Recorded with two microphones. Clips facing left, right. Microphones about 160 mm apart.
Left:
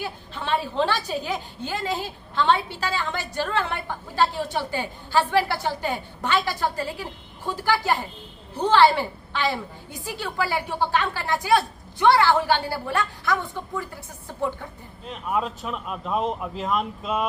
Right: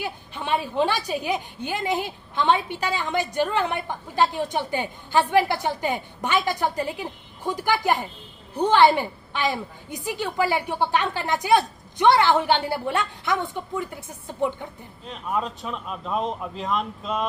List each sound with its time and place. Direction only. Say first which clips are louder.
0.0 s a woman's voice: right 1 dB; 15° right (ahead or behind)
15.0 s speech: left 1 dB; 5° left (ahead or behind)